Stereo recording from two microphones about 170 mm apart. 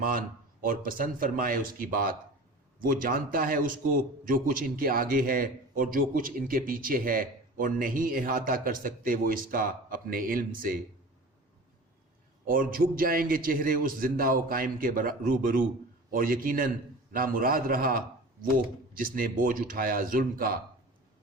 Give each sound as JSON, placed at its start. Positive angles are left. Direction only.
{"t": 0.0, "sound": "a man's voice", "side_deg": -55}
{"t": 12.5, "sound": "a man's voice", "side_deg": -55}